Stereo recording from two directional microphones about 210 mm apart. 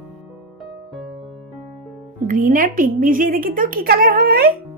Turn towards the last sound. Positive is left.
turn(degrees=-45)  # may be behind; listen again after turning